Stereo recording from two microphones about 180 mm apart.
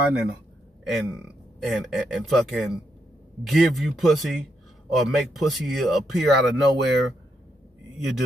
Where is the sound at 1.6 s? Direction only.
Centre (ahead or behind).